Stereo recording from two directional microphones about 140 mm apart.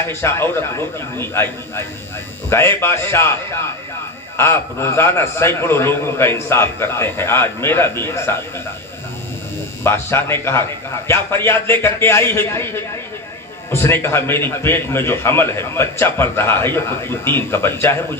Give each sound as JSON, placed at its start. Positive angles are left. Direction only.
{"t": 0.0, "sound": "a man's voice", "side_deg": 15}
{"t": 9.8, "sound": "a man's voice", "side_deg": 15}